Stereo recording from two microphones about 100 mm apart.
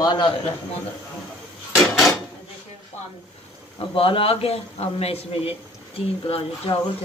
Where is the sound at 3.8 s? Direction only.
65° left (ahead or behind); by 5.5 s 80° left.